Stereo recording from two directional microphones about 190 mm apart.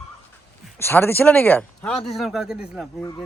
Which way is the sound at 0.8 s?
10° left (ahead or behind).